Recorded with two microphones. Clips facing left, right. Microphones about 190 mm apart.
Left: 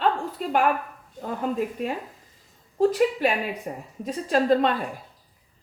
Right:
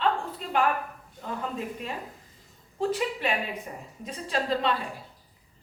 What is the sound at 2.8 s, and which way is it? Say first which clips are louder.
A woman's voice: left 8 dB; 45° left (ahead or behind).